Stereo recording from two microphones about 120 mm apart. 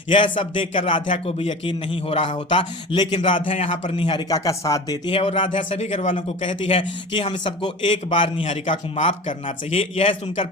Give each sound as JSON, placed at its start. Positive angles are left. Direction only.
{"t": 0.1, "sound": "a man's voice", "side_deg": 45}
{"t": 3.4, "sound": "speech", "side_deg": 55}
{"t": 5.1, "sound": "speech", "side_deg": 50}
{"t": 6.4, "sound": "a man's voice", "side_deg": 50}
{"t": 8.4, "sound": "speech", "side_deg": 75}
{"t": 9.7, "sound": "a man's voice", "side_deg": 50}